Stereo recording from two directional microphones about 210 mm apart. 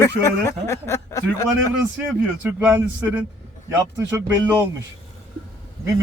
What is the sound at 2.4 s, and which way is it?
Speech, 5° right (ahead or behind).